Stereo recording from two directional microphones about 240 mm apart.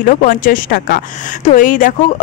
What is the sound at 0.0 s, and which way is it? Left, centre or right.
A woman's voice, left.